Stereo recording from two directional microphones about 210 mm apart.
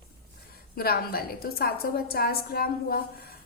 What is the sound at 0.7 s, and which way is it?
A woman's voice, 45° left (ahead or behind).